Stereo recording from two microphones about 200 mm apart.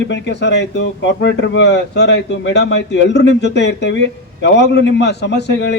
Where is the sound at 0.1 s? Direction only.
60° left (ahead or behind).